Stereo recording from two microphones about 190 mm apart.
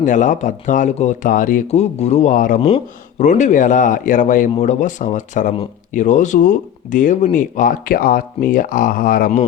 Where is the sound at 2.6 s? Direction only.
30° left (ahead or behind).